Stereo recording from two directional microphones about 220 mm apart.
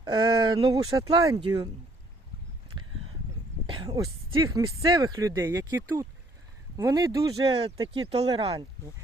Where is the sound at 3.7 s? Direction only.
20° right (ahead or behind).